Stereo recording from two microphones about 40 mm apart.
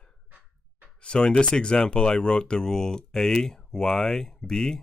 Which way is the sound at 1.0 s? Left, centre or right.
Left.